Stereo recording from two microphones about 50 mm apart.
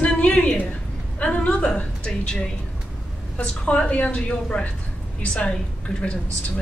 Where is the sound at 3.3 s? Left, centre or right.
Left.